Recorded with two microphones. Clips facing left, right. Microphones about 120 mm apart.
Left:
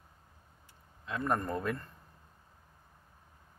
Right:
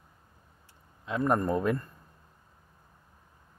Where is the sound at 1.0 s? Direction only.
20° right (ahead or behind).